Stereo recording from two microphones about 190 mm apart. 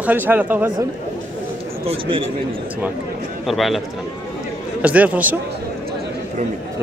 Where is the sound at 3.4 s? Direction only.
Centre (ahead or behind).